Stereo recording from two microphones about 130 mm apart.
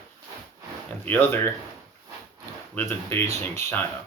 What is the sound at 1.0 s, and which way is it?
Speech, 15° left (ahead or behind).